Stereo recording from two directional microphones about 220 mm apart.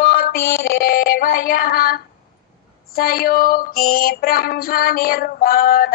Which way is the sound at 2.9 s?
40° left (ahead or behind).